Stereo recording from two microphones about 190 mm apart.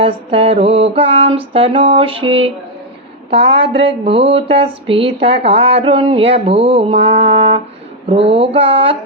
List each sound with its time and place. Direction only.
0.0 s speech: 30° right (ahead or behind)